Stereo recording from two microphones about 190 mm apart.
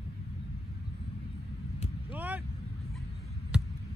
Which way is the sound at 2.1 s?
10° right (ahead or behind).